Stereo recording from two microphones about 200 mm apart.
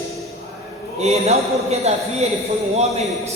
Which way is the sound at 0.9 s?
30° right (ahead or behind).